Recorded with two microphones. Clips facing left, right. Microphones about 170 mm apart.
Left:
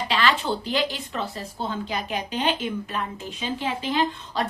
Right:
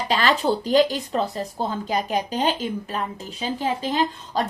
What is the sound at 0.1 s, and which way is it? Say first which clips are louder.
Speech: right 4 dB; 40° right (ahead or behind).